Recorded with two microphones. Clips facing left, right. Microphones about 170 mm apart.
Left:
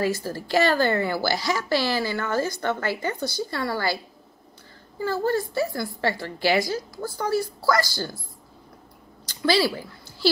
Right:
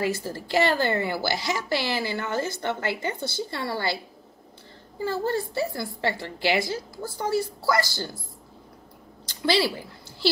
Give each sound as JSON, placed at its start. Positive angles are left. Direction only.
{"t": 0.0, "sound": "a woman's voice", "side_deg": -20}
{"t": 5.0, "sound": "a woman's voice", "side_deg": -25}
{"t": 9.2, "sound": "a woman's voice", "side_deg": -25}